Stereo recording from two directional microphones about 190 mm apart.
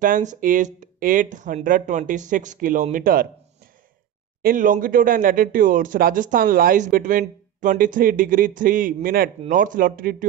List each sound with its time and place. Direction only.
0.0 s speech: 45° right (ahead or behind)
4.4 s speech: 50° right (ahead or behind)